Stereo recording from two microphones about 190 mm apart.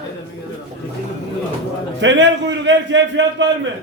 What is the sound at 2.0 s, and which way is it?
A man's voice, 70° right (ahead or behind).